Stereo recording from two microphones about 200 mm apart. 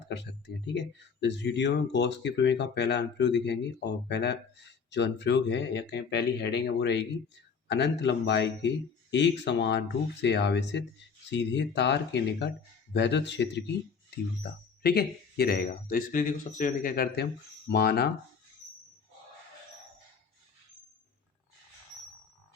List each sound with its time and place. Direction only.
0.1 s speech: 60° left (ahead or behind)